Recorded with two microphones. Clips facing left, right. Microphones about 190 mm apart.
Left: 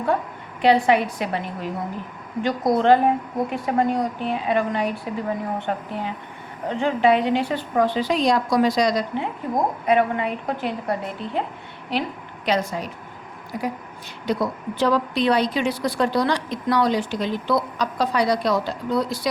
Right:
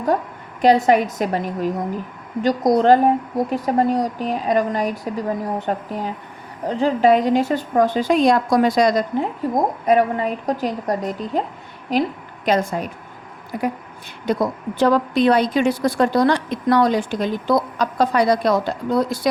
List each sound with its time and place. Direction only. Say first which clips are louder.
0.6 s a woman's voice: right 3 dB; 45° right (ahead or behind)